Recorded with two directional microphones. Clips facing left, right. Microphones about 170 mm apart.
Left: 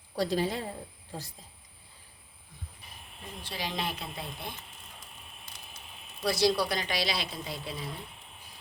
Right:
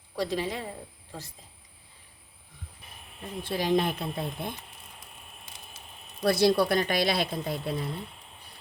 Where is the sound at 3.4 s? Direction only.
50° right (ahead or behind).